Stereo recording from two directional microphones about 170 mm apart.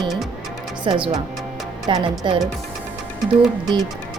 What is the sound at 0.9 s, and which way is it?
Speech, 30° right (ahead or behind).